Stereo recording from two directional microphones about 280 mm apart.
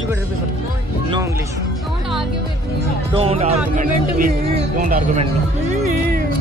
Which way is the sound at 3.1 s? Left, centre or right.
Centre.